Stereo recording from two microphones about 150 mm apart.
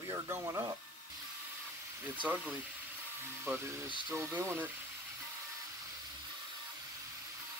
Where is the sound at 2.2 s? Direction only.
10° right (ahead or behind).